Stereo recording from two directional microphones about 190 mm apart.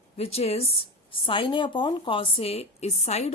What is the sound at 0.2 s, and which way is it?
Speech, 35° left (ahead or behind).